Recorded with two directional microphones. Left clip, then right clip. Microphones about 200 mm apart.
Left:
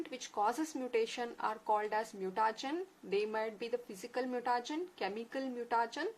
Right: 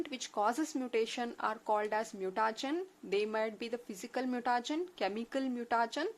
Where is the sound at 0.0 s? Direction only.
35° right (ahead or behind).